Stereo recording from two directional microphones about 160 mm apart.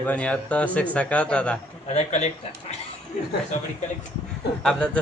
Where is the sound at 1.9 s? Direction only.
45° left (ahead or behind).